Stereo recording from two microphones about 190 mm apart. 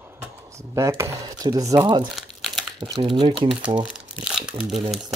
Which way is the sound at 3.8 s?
5° right (ahead or behind).